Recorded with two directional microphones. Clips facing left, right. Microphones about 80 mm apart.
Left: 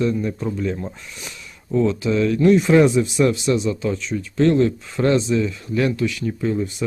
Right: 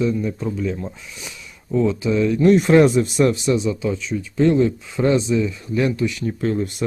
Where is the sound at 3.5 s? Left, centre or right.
Right.